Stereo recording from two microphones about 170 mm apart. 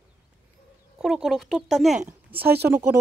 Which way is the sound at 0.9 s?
5° right (ahead or behind).